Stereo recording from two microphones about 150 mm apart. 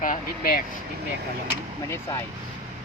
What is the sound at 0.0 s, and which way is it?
Speech, 70° left (ahead or behind).